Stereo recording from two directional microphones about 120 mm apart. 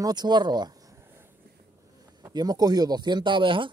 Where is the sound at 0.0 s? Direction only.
35° right (ahead or behind).